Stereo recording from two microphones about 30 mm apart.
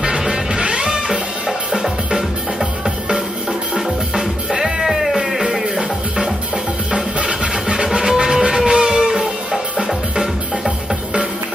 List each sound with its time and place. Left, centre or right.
0.3 s music: right
1.7 s music: right
4.5 s music: centre
5.4 s music: right
6.9 s music: right
7.6 s music: right